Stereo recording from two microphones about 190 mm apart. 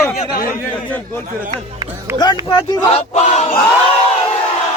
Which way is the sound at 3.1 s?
35° left (ahead or behind).